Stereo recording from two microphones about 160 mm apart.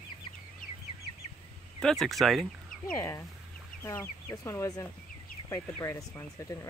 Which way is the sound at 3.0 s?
20° left (ahead or behind).